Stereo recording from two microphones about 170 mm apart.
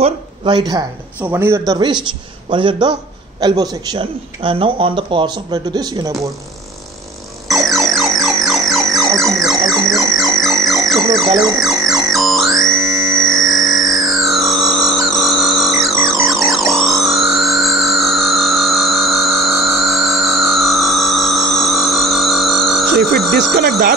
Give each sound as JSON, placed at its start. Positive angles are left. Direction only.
{"t": 0.0, "sound": "speech", "side_deg": -25}
{"t": 1.2, "sound": "a man's voice", "side_deg": -15}
{"t": 1.7, "sound": "a man's voice", "side_deg": -25}
{"t": 7.4, "sound": "music", "side_deg": 0}
{"t": 11.0, "sound": "music", "side_deg": -20}
{"t": 11.5, "sound": "music", "side_deg": 0}
{"t": 23.3, "sound": "speech", "side_deg": -70}